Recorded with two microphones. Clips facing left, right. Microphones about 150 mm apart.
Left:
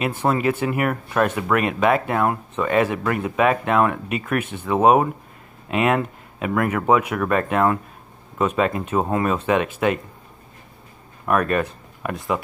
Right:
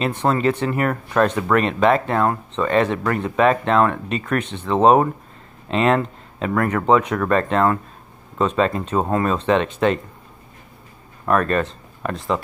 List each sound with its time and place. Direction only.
0.2 s speech: 10° left (ahead or behind)
11.2 s speech: 10° left (ahead or behind)